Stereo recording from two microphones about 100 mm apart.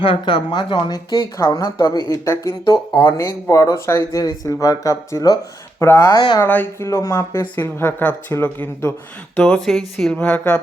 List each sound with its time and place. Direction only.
0.0 s speech: 60° left (ahead or behind)
0.9 s speech: 35° left (ahead or behind)
5.8 s speech: 25° left (ahead or behind)
6.1 s speech: 45° left (ahead or behind)
6.4 s speech: 20° left (ahead or behind)
6.8 s speech: 30° left (ahead or behind)
9.4 s speech: 5° left (ahead or behind)
10.2 s a woman's voice: 15° left (ahead or behind)